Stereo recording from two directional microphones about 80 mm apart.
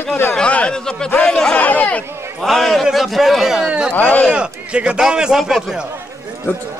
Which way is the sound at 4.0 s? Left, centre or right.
Left.